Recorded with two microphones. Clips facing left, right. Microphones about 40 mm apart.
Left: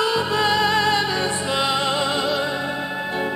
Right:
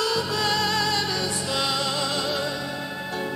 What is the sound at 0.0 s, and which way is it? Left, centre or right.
Music, left.